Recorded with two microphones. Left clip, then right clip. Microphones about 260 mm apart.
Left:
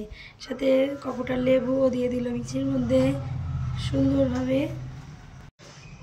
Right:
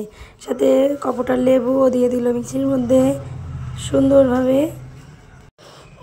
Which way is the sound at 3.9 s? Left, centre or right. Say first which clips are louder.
Right 9 dB; right.